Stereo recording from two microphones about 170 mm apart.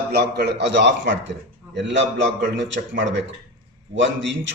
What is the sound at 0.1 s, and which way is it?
A man's voice, 70° right (ahead or behind).